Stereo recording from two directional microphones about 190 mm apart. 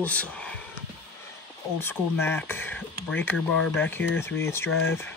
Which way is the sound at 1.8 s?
10° left (ahead or behind).